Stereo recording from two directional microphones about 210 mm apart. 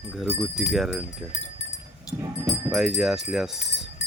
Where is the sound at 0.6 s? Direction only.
Centre (ahead or behind).